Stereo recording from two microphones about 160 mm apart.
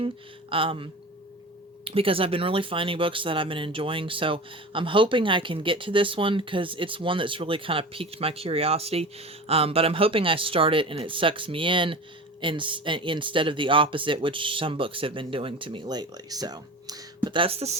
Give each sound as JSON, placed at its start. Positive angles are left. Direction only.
{"t": 0.5, "sound": "speech", "side_deg": -35}